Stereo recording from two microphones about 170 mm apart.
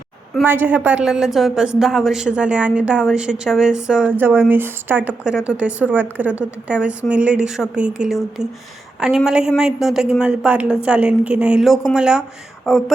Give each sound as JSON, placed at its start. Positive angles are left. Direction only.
{"t": 0.4, "sound": "a woman's voice", "side_deg": -10}